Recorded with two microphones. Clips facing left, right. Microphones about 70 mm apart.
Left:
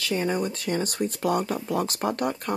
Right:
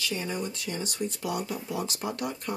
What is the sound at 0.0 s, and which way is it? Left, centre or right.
Speech, left.